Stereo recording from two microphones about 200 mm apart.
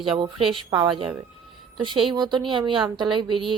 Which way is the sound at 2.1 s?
20° right (ahead or behind).